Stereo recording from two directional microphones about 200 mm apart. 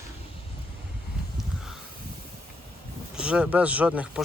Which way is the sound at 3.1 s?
5° right (ahead or behind).